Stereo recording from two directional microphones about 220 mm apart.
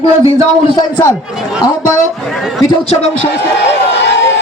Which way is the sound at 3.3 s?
50° left (ahead or behind).